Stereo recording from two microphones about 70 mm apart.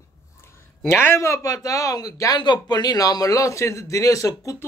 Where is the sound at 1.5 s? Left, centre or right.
Left.